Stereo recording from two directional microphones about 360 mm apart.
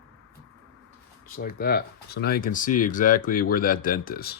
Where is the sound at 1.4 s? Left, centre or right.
Left.